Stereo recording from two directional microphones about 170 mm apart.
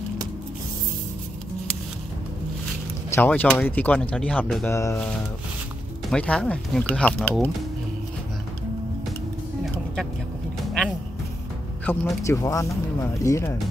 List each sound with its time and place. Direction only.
3.1 s speech: 10° left (ahead or behind)
4.6 s speech: 15° left (ahead or behind)
11.8 s speech: 10° left (ahead or behind)